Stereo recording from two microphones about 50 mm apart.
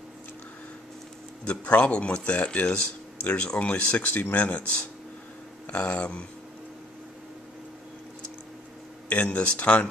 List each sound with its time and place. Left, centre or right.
1.4 s speech: left
4.1 s speech: left
4.4 s speech: left
5.7 s speech: left
9.1 s speech: left